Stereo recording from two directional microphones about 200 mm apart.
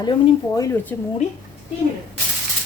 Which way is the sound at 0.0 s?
20° left (ahead or behind).